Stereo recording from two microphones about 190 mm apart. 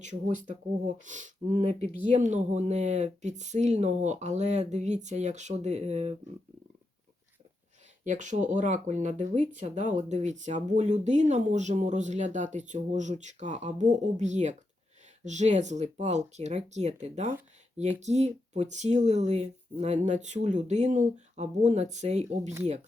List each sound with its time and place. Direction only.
0.0 s speech: 40° right (ahead or behind)
8.0 s speech: 40° right (ahead or behind)